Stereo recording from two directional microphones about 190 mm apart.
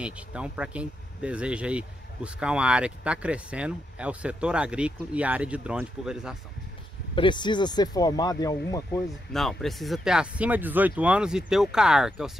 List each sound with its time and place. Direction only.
0.0 s speech: 5° right (ahead or behind)
7.2 s speech: 25° left (ahead or behind)
9.3 s speech: centre (ahead or behind)